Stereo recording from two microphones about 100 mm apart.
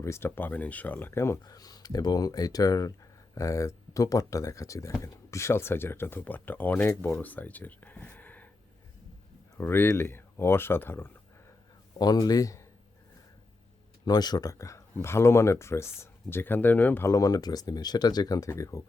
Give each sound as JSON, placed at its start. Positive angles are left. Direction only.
{"t": 0.0, "sound": "speech", "side_deg": 25}
{"t": 1.5, "sound": "speech", "side_deg": 40}
{"t": 9.6, "sound": "speech", "side_deg": 25}
{"t": 11.9, "sound": "speech", "side_deg": 40}
{"t": 14.0, "sound": "speech", "side_deg": 45}
{"t": 17.1, "sound": "speech", "side_deg": 35}